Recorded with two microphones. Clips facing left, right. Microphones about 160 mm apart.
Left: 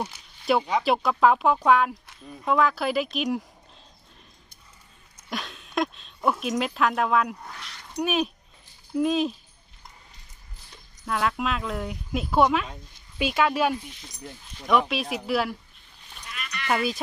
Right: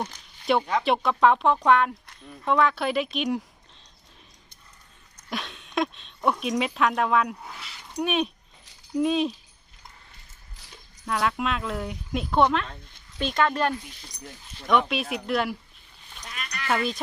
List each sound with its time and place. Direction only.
0.0 s speech: 5° left (ahead or behind)
5.3 s speech: centre (ahead or behind)
11.0 s speech: centre (ahead or behind)
16.2 s sheep: 40° right (ahead or behind)
16.6 s speech: 5° left (ahead or behind)